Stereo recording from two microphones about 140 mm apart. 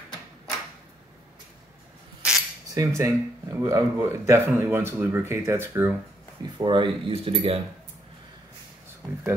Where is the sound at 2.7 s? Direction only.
25° right (ahead or behind).